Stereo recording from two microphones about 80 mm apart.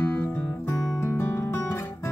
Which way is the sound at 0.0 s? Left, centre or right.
Centre.